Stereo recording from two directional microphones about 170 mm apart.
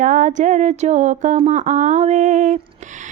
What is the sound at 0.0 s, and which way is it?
Speech, 50° right (ahead or behind).